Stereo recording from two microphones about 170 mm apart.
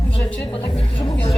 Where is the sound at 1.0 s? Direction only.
30° left (ahead or behind).